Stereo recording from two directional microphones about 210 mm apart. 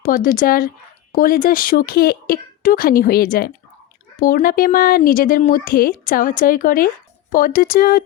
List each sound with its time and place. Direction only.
0.0 s speech: 40° left (ahead or behind)